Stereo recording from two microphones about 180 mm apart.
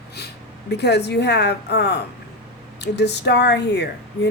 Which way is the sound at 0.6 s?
70° left (ahead or behind).